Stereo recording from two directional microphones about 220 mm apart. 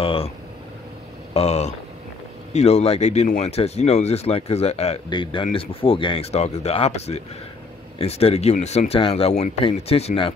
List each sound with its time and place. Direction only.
0.0 s speech: 25° left (ahead or behind)
1.3 s speech: 30° left (ahead or behind)